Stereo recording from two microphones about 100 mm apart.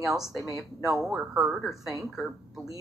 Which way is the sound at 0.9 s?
5° right (ahead or behind).